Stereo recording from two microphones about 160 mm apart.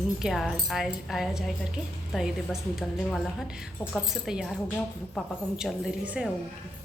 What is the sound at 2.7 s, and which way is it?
A woman's voice, centre (ahead or behind).